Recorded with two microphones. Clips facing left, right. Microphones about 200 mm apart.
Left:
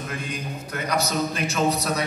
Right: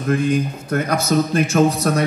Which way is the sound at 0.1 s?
50° right (ahead or behind).